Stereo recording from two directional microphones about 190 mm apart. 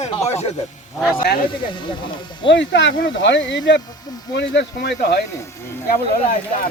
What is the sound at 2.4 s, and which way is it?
Speech, 70° left (ahead or behind).